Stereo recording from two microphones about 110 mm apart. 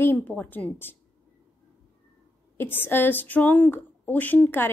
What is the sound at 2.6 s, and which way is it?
A woman's voice, 20° left (ahead or behind).